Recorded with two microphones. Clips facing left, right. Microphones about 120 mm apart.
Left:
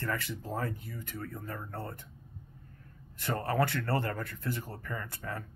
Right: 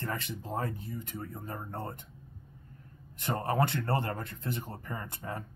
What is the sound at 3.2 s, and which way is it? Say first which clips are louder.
Speech: right 1 dB; 20° right (ahead or behind).